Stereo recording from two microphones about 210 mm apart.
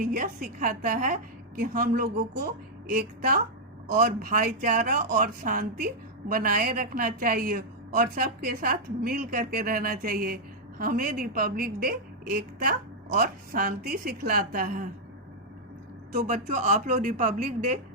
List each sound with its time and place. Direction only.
0.0 s a woman's voice: 40° right (ahead or behind)
16.1 s a woman's voice: 35° right (ahead or behind)